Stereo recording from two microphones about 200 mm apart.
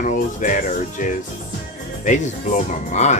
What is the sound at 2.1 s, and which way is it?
Speech, 40° left (ahead or behind).